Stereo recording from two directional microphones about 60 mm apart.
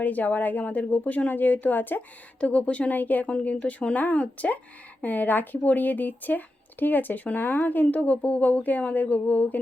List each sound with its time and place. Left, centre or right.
0.0 s a woman's voice: left